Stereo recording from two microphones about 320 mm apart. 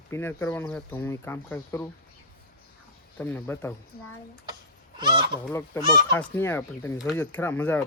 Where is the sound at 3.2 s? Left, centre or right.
Centre.